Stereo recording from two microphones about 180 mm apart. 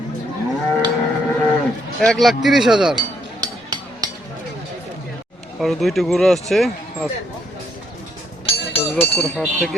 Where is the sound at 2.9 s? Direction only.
20° right (ahead or behind).